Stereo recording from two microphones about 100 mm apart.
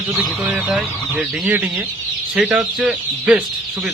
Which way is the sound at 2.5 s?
5° right (ahead or behind).